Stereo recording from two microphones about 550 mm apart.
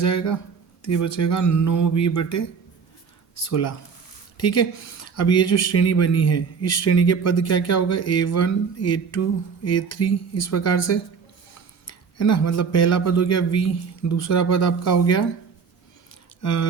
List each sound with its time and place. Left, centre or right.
0.0 s a man's voice: left
16.4 s a man's voice: left